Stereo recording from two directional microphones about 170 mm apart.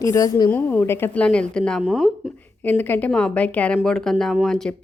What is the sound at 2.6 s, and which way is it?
Speech, 10° left (ahead or behind).